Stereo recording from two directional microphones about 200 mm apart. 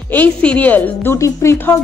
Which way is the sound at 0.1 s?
5° left (ahead or behind).